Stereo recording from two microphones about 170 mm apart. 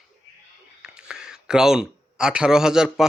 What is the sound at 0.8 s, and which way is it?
Speech, 5° right (ahead or behind).